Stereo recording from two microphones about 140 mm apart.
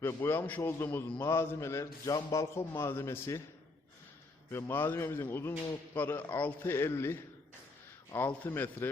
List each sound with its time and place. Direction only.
0.0 s a man's voice: 15° left (ahead or behind)
4.5 s speech: 15° left (ahead or behind)